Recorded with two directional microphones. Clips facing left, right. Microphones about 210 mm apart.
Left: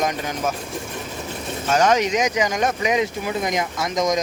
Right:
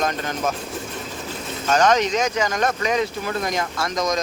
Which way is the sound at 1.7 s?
10° left (ahead or behind).